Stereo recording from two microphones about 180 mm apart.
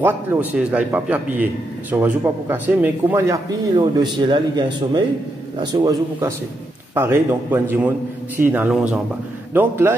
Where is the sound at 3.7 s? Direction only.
25° right (ahead or behind).